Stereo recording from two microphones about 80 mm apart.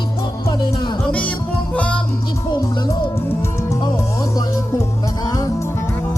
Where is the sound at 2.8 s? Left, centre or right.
Left.